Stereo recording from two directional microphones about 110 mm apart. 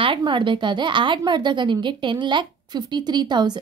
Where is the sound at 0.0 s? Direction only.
50° right (ahead or behind).